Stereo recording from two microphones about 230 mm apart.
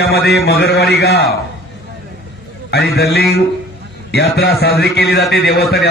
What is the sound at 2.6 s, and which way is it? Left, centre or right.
A man's voice, left.